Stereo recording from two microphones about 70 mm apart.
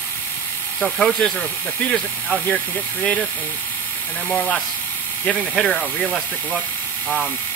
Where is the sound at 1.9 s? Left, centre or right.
Centre.